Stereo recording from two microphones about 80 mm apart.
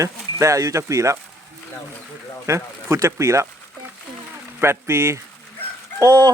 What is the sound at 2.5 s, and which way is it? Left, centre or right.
Speech, right.